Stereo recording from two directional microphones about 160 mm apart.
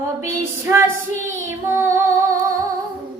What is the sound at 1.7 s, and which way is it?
Female singing, 15° right (ahead or behind).